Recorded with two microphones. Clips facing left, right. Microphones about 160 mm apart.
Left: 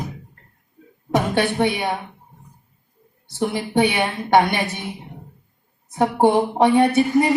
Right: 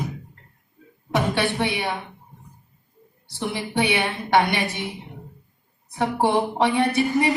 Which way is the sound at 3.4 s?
45° left (ahead or behind).